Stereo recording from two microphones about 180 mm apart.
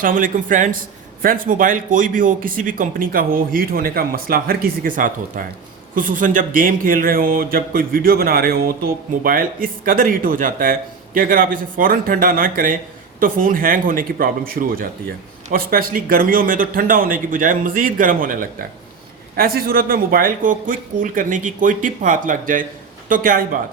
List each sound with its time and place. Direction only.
0.0 s a man's voice: 50° right (ahead or behind)